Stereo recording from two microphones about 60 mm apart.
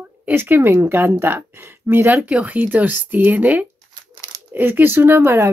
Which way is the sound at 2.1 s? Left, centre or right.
Centre.